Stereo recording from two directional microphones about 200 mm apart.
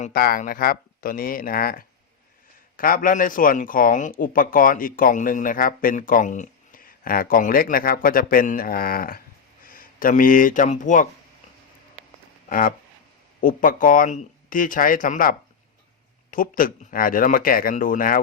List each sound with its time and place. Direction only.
0.0 s speech: 45° left (ahead or behind)
12.5 s speech: 45° left (ahead or behind)